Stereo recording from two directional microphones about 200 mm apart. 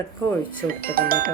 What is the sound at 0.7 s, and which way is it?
Speech, 45° right (ahead or behind).